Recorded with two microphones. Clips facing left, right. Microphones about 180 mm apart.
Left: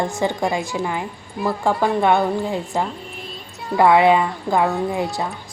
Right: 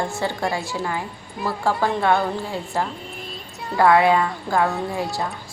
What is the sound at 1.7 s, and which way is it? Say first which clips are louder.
Speech: left 2 dB; centre (ahead or behind).